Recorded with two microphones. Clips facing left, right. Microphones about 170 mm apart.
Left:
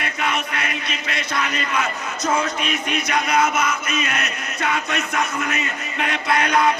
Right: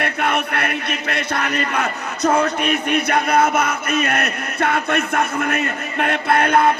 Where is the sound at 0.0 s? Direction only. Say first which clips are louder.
Right 4 dB; 55° right (ahead or behind).